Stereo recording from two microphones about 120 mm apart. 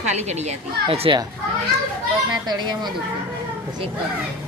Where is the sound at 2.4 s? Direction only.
35° right (ahead or behind).